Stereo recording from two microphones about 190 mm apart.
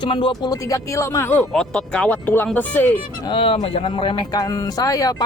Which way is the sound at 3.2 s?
30° left (ahead or behind).